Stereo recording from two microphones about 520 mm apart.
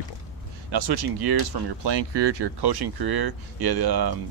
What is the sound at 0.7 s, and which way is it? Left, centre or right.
Speech, right.